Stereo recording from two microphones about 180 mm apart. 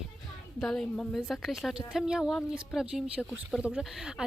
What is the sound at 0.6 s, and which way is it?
Speech, centre (ahead or behind).